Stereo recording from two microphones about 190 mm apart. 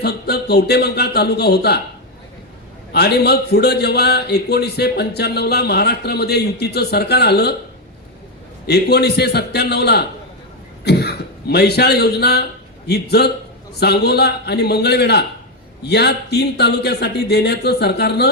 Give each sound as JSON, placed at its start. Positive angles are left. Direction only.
{"t": 0.0, "sound": "a man's voice", "side_deg": 55}
{"t": 2.9, "sound": "a man's voice", "side_deg": 60}
{"t": 8.6, "sound": "a man's voice", "side_deg": 60}